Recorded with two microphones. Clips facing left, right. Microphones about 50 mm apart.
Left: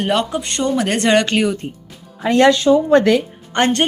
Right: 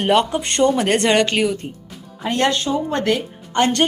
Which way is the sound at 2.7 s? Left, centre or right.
Left.